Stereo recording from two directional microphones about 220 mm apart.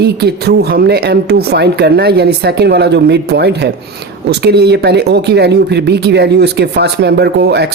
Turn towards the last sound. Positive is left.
turn(degrees=-50)  # may be behind; listen again after turning